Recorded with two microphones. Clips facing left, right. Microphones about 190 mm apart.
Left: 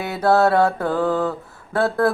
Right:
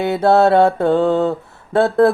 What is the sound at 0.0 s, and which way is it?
Mantra, 25° right (ahead or behind).